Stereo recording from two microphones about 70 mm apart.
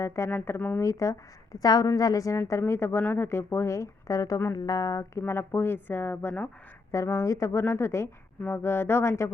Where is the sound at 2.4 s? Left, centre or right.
Left.